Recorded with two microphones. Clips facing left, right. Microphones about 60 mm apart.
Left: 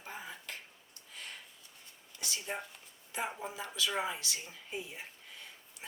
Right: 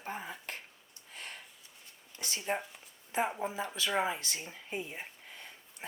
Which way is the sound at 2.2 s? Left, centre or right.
Right.